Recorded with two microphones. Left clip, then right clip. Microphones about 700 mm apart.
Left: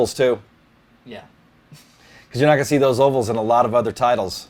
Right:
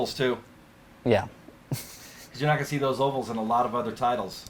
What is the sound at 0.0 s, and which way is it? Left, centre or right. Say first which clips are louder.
Speech: left 9 dB; left.